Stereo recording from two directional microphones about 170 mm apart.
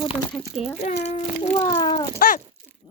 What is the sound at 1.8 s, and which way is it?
Speech, 25° left (ahead or behind).